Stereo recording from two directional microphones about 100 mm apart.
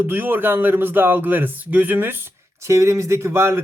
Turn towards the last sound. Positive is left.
turn(degrees=-25)  # may be behind; listen again after turning